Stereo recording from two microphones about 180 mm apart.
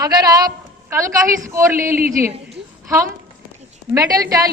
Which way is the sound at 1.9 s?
50° right (ahead or behind).